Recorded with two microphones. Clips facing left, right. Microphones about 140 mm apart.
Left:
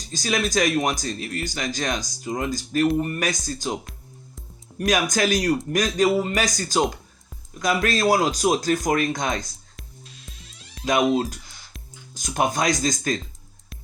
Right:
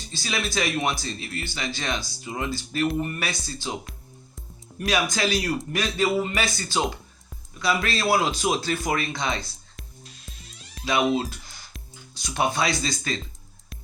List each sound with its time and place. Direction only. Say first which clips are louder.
0.1 s speech: left 6 dB; 45° left (ahead or behind)
4.9 s speech: left 3 dB; 45° left (ahead or behind)
10.8 s speech: left 3 dB; 45° left (ahead or behind)